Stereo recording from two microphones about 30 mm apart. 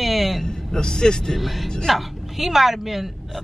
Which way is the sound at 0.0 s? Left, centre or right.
Centre.